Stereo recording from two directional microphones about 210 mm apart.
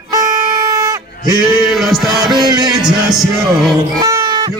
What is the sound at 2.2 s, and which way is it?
Music, 20° right (ahead or behind).